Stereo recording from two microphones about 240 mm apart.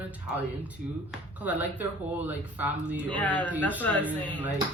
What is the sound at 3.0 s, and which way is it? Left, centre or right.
Speech, centre.